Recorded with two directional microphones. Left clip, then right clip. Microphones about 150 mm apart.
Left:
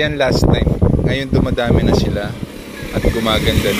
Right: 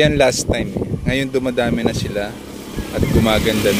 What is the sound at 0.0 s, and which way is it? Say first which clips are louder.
Speech: right 1 dB; 90° right.